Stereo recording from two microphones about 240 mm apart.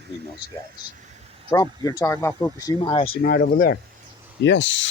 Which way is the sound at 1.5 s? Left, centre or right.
Centre.